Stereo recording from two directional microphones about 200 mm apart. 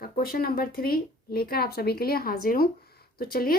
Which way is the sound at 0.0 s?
50° left (ahead or behind).